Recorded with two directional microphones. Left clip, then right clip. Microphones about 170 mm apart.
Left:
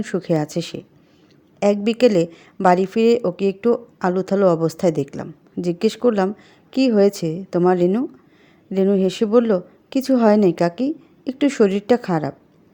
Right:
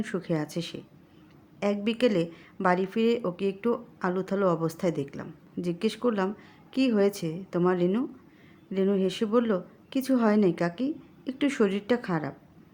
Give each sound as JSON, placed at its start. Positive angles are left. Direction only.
{"t": 0.0, "sound": "a woman's voice", "side_deg": 35}